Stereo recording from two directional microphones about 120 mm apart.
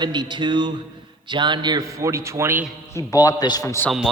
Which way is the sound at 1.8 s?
25° right (ahead or behind).